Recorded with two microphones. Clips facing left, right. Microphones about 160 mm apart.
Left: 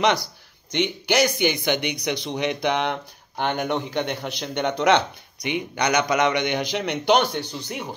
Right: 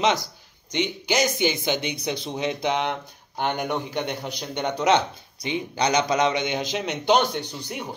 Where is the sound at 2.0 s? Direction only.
75° left (ahead or behind).